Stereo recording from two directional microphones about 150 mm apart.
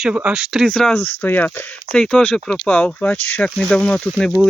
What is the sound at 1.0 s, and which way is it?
Speech, 10° left (ahead or behind).